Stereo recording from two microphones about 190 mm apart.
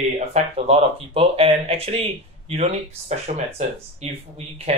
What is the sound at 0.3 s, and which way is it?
Speech, 35° right (ahead or behind).